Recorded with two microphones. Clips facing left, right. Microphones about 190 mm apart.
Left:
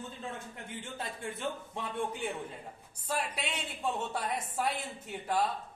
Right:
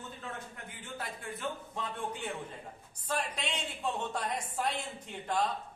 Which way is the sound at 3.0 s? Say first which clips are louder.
Even; 10° left (ahead or behind).